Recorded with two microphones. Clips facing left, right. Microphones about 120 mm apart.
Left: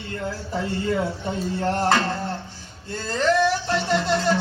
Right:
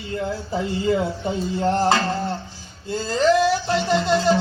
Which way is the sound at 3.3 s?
25° right (ahead or behind).